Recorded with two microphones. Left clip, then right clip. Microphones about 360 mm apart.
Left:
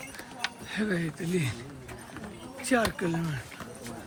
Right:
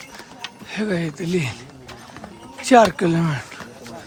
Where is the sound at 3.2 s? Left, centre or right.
Centre.